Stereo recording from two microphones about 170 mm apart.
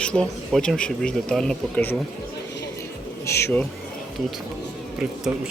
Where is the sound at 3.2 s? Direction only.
15° left (ahead or behind).